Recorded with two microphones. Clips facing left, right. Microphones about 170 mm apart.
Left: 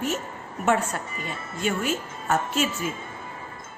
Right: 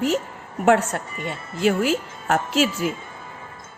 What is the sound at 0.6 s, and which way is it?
A woman's voice, 75° right (ahead or behind).